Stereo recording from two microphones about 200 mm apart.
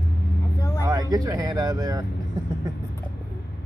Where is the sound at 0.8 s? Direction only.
15° right (ahead or behind).